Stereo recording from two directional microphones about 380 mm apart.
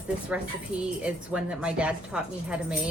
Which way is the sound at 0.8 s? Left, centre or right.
Centre.